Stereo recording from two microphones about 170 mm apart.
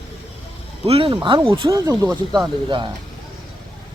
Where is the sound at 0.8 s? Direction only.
30° right (ahead or behind).